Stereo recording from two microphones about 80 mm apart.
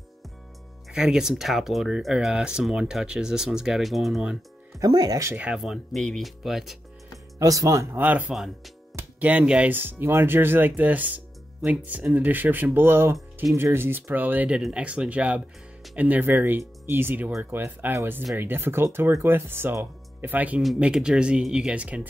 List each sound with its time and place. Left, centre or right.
0.9 s speech: centre
4.7 s speech: right
5.3 s speech: centre
5.6 s speech: centre
7.3 s speech: right
7.9 s speech: centre
8.3 s speech: centre
9.2 s speech: centre
9.7 s speech: right
20.8 s speech: centre